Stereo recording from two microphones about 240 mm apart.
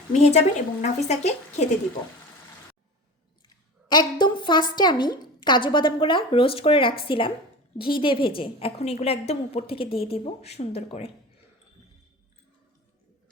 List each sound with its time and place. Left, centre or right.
0.1 s a woman's voice: left
3.4 s a sound: centre
4.7 s a woman's voice: centre